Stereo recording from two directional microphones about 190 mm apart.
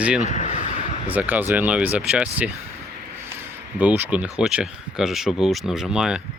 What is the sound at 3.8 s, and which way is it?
Speech, 10° right (ahead or behind).